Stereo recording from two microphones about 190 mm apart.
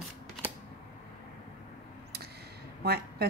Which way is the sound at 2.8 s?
55° right (ahead or behind).